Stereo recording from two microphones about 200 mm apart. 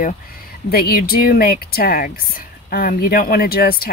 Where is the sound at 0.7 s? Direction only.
50° left (ahead or behind).